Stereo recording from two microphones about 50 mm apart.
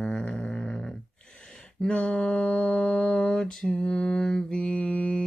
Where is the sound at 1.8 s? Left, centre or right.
Left.